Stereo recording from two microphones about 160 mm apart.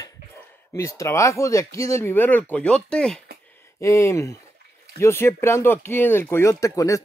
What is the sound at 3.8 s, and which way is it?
Speech, 20° left (ahead or behind).